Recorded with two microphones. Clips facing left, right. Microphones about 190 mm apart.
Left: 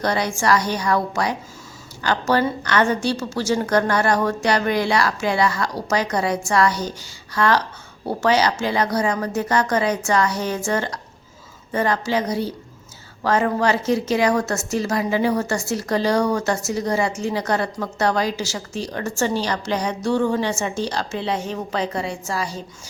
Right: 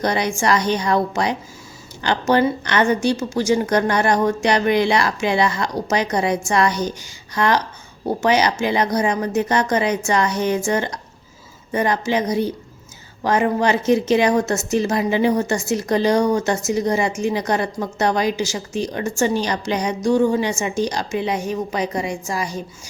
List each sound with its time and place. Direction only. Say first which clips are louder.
0.0 s a woman's voice: right 1 dB; 20° right (ahead or behind)